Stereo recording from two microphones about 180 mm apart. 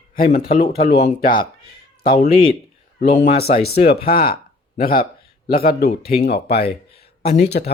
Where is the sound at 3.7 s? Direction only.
65° left (ahead or behind).